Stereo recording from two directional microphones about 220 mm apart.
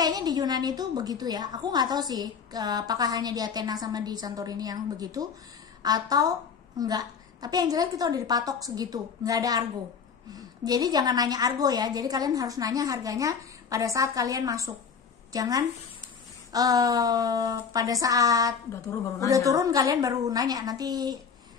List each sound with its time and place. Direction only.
0.0 s a woman's voice: 20° right (ahead or behind)
18.7 s a woman's voice: 15° left (ahead or behind)
19.2 s a woman's voice: 15° right (ahead or behind)